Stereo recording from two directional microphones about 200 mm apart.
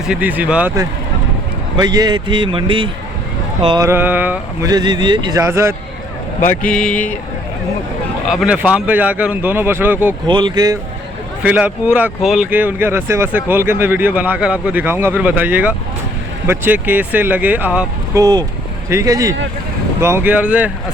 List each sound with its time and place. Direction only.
0.1 s speech: 10° right (ahead or behind)
1.7 s a man's voice: 20° right (ahead or behind)
3.8 s speech: 10° right (ahead or behind)
4.7 s a man's voice: 20° right (ahead or behind)
6.4 s speech: 40° left (ahead or behind)
6.7 s speech: 5° left (ahead or behind)
8.3 s speech: 5° right (ahead or behind)
10.2 s a man's voice: 25° right (ahead or behind)
11.4 s speech: 5° right (ahead or behind)
18.2 s a man's voice: 20° right (ahead or behind)